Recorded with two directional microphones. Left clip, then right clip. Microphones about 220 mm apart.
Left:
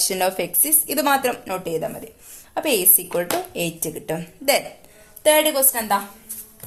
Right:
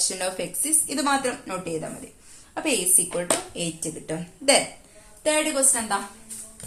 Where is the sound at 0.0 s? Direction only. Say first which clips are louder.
Left 6 dB; 40° left (ahead or behind).